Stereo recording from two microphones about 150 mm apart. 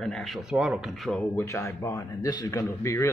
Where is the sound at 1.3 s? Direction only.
20° left (ahead or behind).